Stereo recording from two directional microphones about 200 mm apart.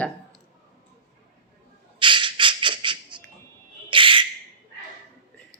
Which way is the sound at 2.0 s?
25° right (ahead or behind).